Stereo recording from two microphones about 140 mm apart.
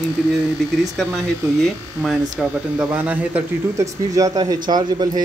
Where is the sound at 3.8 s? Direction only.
25° right (ahead or behind).